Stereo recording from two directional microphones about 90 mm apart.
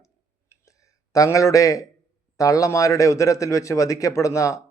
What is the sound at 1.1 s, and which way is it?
A man's voice, 40° left (ahead or behind).